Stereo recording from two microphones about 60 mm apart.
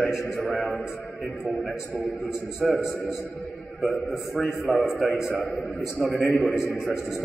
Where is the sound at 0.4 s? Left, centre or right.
Centre.